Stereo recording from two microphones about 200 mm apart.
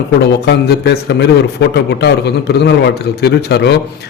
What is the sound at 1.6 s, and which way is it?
A man's voice, 55° left (ahead or behind).